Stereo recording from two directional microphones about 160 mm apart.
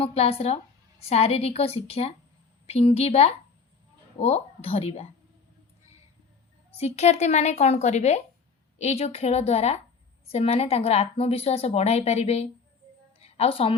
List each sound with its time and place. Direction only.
0.0 s a woman's voice: 40° left (ahead or behind)
6.7 s a woman's voice: 45° left (ahead or behind)
13.1 s a sound: 40° left (ahead or behind)